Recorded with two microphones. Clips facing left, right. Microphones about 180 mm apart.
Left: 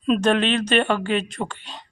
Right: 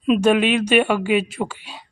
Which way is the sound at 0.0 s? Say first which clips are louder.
Right 3 dB; 10° right (ahead or behind).